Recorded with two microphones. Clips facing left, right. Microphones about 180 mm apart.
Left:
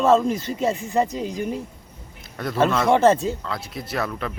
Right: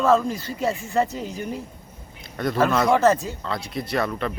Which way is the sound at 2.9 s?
25° left (ahead or behind).